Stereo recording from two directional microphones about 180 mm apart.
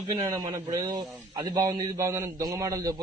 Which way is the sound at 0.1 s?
20° right (ahead or behind).